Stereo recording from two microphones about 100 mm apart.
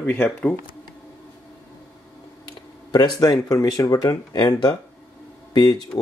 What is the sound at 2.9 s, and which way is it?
Speech, 40° left (ahead or behind).